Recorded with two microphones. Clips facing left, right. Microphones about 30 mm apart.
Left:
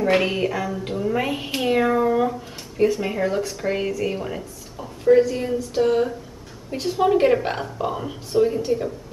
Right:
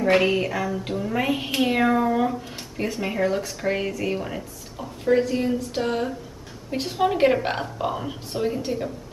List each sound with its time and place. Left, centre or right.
0.0 s a woman's voice: centre